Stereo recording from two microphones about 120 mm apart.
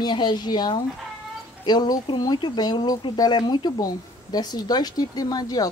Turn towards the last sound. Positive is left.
turn(degrees=30)  # may be behind; listen again after turning